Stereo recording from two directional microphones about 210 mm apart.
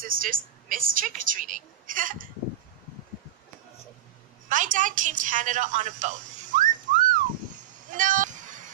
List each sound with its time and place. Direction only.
0.0 s a woman's voice: 40° right (ahead or behind)
4.5 s a woman's voice: 40° right (ahead or behind)
7.9 s a sound: 40° right (ahead or behind)